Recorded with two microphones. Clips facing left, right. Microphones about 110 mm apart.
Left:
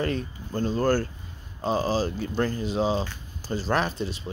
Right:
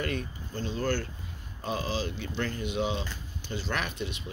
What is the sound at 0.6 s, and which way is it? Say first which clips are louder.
Speech: left 7 dB; 45° left (ahead or behind).